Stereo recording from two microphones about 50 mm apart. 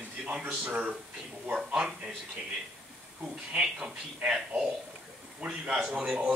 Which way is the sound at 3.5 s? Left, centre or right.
Centre.